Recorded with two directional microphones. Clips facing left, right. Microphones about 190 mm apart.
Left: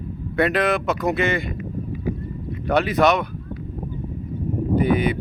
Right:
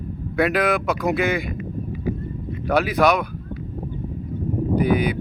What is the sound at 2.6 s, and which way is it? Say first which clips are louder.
Speech: even; centre (ahead or behind).